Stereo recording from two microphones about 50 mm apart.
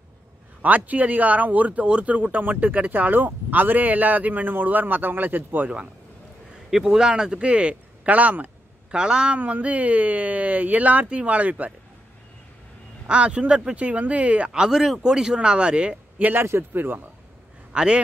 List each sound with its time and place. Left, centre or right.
0.6 s speech: right
6.7 s speech: centre; by 8.5 s right
8.9 s speech: centre
9.4 s speech: right
13.0 s speech: right
16.2 s speech: right
16.4 s speech: right
17.7 s speech: centre